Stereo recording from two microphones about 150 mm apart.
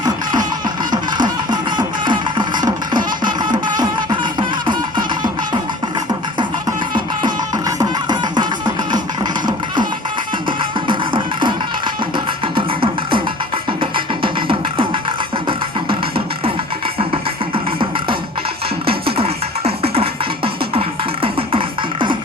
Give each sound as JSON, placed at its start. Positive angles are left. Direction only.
{"t": 0.0, "sound": "music", "side_deg": -25}
{"t": 0.9, "sound": "a sound", "side_deg": -30}
{"t": 6.4, "sound": "music", "side_deg": -30}
{"t": 17.5, "sound": "music", "side_deg": -35}